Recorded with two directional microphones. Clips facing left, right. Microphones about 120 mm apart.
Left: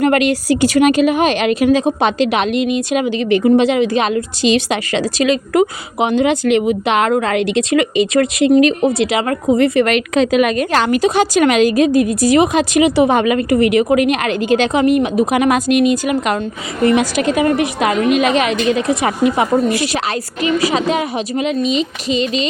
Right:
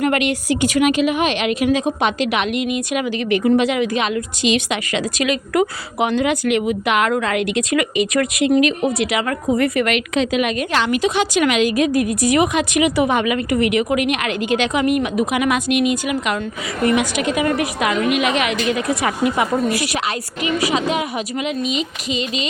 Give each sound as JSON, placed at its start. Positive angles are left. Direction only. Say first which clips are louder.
{"t": 0.0, "sound": "a woman's voice", "louder": "left 5 dB", "side_deg": 35}
{"t": 11.9, "sound": "a woman's voice", "louder": "left 4 dB", "side_deg": 25}